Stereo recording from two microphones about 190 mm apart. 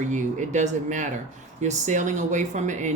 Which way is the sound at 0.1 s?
40° right (ahead or behind).